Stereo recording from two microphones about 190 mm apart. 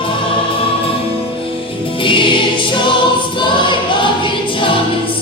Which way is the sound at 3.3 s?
25° left (ahead or behind).